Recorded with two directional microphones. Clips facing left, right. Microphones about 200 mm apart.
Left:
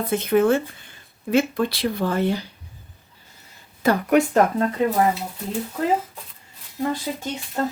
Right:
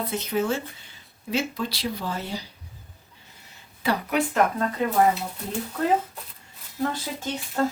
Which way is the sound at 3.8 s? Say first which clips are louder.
Left 7 dB; 45° left (ahead or behind).